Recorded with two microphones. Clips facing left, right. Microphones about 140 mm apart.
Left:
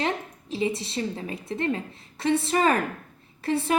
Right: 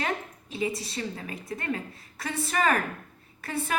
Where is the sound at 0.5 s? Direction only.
25° left (ahead or behind).